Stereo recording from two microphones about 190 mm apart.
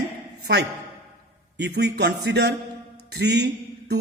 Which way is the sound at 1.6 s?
60° right (ahead or behind).